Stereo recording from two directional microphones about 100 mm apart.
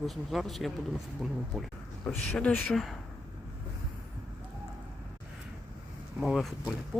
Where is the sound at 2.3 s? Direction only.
20° left (ahead or behind).